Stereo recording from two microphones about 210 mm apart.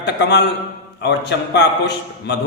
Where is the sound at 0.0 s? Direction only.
55° left (ahead or behind).